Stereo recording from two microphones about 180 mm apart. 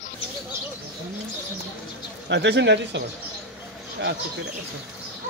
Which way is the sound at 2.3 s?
75° right (ahead or behind).